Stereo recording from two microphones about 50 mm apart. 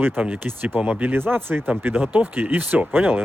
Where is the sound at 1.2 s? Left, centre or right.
Right.